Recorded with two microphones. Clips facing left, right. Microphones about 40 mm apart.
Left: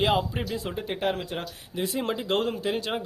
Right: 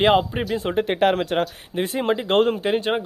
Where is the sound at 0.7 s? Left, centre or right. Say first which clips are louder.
Right 11 dB; right.